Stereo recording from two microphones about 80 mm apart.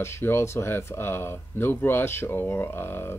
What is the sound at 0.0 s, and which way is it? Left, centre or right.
Speech, left.